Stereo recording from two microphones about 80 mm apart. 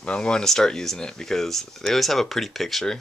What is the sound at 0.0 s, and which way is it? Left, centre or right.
Speech, centre.